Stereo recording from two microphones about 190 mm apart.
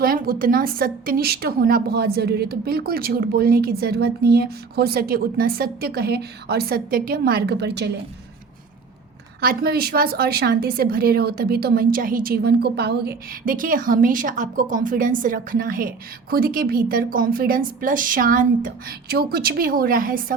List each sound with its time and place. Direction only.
0.0 s a woman's voice: 50° right (ahead or behind)
9.4 s a woman's voice: 50° right (ahead or behind)